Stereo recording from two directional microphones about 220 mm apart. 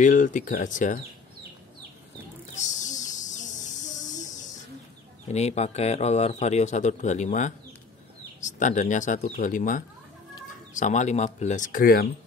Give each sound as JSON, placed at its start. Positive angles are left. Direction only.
{"t": 0.0, "sound": "speech", "side_deg": 35}
{"t": 2.5, "sound": "a sound", "side_deg": 35}
{"t": 5.3, "sound": "speech", "side_deg": 30}